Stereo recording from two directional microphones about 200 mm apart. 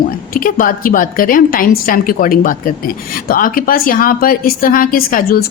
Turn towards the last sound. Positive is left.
turn(degrees=50)  # may be behind; listen again after turning